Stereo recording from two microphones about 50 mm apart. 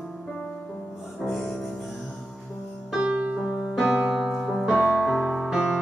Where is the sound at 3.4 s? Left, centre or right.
Centre.